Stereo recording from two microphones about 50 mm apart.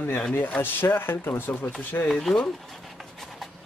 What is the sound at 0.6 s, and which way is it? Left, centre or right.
Speech, left.